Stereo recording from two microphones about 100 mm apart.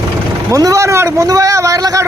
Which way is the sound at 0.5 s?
35° right (ahead or behind).